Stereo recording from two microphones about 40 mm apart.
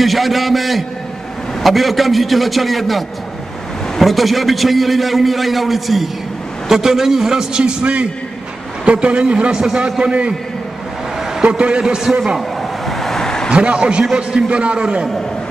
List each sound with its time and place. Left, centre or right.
0.0 s a man's voice: centre
4.0 s a man's voice: centre
7.8 s a man's voice: right
11.4 s a man's voice: right
12.4 s vehicle: centre
13.5 s a man's voice: right